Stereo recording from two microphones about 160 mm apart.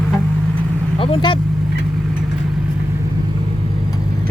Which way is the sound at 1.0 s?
35° left (ahead or behind).